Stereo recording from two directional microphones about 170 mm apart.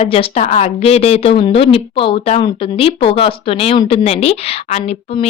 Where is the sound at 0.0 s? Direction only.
35° left (ahead or behind).